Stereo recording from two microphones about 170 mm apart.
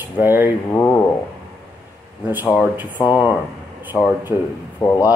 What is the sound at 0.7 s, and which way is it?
Speech, 15° left (ahead or behind).